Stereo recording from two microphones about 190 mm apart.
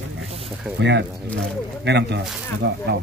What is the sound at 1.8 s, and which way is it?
Speech, 65° right (ahead or behind).